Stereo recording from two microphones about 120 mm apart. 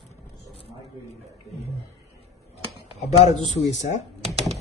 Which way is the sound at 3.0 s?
65° left (ahead or behind).